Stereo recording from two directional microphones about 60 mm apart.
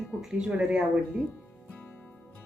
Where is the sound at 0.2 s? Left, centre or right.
Centre.